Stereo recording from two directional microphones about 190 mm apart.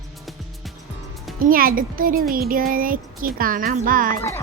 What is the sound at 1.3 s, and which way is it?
Child singing, 50° right (ahead or behind).